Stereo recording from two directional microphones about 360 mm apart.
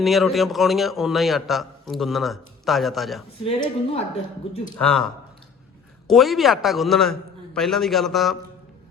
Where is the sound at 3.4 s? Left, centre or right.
Centre.